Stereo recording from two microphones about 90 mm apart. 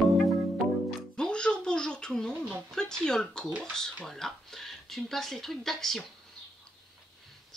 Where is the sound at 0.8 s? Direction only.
10° left (ahead or behind).